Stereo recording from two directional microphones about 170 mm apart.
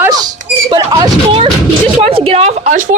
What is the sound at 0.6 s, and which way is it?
Speech, 25° right (ahead or behind).